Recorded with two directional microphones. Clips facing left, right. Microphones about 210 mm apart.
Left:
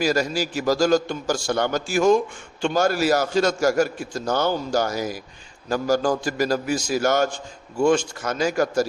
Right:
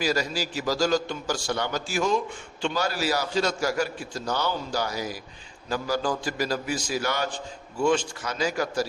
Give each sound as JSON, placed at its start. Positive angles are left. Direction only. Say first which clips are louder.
{"t": 0.0, "sound": "a man's voice", "louder": "left 5 dB", "side_deg": 45}